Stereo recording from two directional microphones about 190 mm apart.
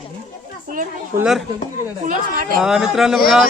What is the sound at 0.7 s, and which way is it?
Speech, 45° right (ahead or behind).